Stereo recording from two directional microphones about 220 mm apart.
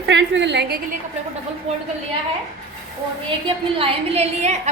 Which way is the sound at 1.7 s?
30° right (ahead or behind).